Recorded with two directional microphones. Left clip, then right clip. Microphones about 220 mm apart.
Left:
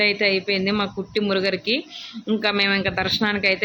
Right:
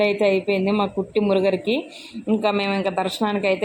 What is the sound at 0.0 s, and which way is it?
Speech, centre (ahead or behind).